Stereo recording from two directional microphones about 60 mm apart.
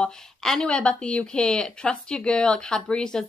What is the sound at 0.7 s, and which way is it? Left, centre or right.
Speech, centre.